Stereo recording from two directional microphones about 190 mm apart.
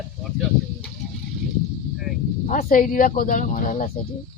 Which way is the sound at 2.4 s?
40° left (ahead or behind).